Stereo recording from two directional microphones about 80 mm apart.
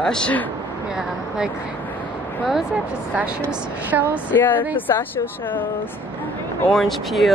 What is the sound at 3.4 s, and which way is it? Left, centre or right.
Speech, right.